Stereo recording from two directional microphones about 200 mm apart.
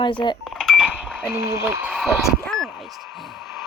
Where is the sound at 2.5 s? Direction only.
Centre (ahead or behind).